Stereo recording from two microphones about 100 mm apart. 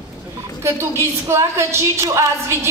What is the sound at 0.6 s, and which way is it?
A woman's voice, 25° right (ahead or behind).